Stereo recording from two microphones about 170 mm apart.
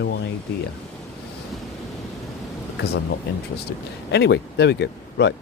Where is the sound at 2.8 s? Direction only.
70° left (ahead or behind).